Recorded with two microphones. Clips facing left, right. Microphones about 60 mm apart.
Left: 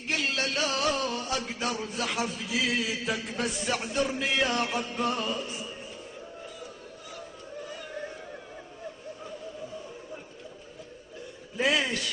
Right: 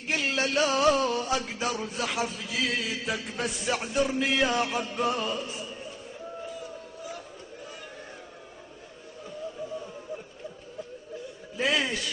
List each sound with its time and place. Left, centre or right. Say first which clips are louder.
0.3 s music: right 4 dB; centre
1.3 s a man's voice: right 2 dB; centre
11.5 s a man's voice: left 1 dB; centre